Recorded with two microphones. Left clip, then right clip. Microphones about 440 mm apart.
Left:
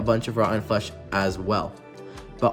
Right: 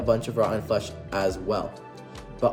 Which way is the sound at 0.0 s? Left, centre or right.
Centre.